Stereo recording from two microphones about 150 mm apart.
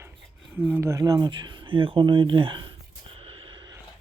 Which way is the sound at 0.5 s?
15° right (ahead or behind).